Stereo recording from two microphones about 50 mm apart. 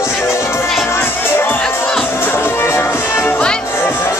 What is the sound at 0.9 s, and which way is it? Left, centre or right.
Music, left.